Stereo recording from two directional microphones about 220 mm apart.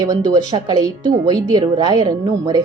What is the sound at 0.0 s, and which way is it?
Speech, 15° right (ahead or behind).